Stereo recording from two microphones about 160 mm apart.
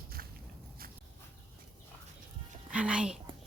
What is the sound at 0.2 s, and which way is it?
Biting, 65° right (ahead or behind).